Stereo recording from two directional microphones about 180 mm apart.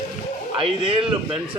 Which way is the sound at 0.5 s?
30° right (ahead or behind).